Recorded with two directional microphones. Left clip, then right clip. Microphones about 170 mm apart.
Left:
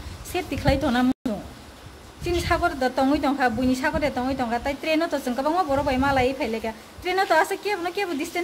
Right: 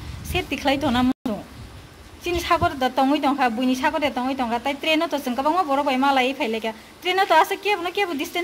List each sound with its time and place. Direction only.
0.3 s a woman's voice: 5° right (ahead or behind)